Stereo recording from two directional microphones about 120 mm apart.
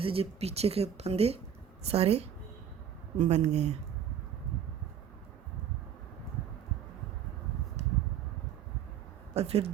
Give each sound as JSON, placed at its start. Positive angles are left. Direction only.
{"t": 0.0, "sound": "speech", "side_deg": -50}
{"t": 3.2, "sound": "speech", "side_deg": -70}
{"t": 9.3, "sound": "speech", "side_deg": -60}